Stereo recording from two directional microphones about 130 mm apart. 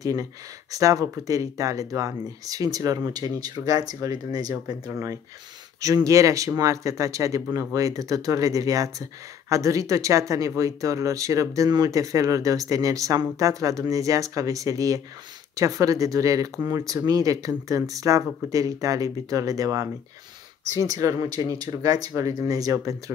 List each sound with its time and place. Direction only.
0.0 s speech: 25° right (ahead or behind)